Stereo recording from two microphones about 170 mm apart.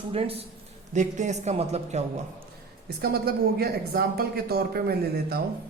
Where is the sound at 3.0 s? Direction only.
65° right (ahead or behind).